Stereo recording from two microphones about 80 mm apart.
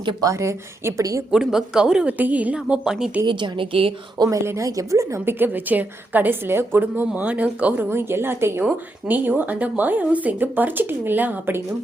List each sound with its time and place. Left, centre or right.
0.2 s a woman's voice: right
1.3 s a woman's voice: centre
3.2 s a woman's voice: right
4.2 s a woman's voice: right; by 7.9 s centre
7.9 s a woman's voice: right